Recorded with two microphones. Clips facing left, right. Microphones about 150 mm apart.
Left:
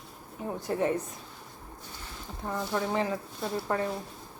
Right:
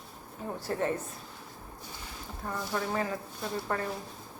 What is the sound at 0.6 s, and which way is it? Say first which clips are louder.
Speech: left 3 dB; 15° left (ahead or behind).